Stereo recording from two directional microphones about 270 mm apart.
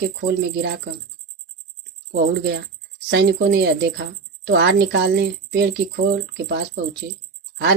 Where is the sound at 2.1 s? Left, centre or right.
Right.